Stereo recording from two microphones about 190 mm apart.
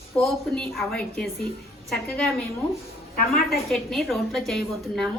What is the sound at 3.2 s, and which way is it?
Speech, 55° left (ahead or behind).